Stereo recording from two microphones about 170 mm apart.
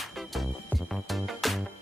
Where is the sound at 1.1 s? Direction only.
Centre (ahead or behind).